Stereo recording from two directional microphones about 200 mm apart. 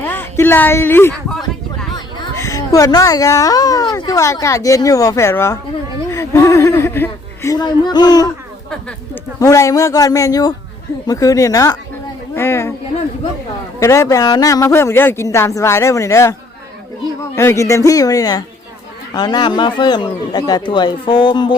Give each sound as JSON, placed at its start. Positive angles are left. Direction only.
{"t": 0.0, "sound": "a child's voice", "side_deg": 10}
{"t": 9.4, "sound": "a woman's voice", "side_deg": 15}
{"t": 13.7, "sound": "a woman's voice", "side_deg": 15}
{"t": 17.3, "sound": "a woman's voice", "side_deg": 15}